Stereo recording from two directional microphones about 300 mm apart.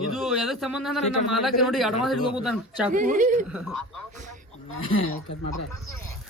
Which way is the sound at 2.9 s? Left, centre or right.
Right.